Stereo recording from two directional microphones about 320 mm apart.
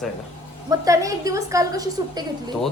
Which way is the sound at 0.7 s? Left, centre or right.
Centre.